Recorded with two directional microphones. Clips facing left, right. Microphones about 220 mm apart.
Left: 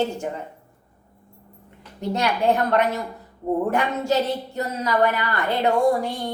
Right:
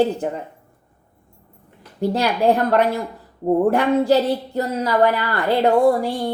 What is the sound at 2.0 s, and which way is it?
A woman's voice, 35° right (ahead or behind).